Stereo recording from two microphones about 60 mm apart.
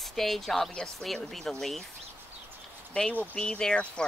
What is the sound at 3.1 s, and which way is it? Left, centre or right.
Speech, left.